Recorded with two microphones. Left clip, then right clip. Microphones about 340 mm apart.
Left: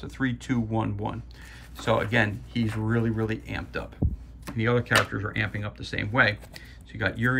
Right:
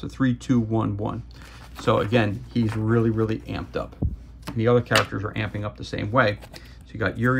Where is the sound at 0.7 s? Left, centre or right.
Left.